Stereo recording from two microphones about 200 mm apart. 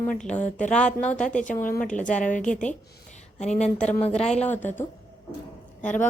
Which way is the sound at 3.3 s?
35° left (ahead or behind).